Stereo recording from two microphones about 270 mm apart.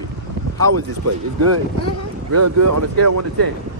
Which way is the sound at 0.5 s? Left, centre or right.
Right.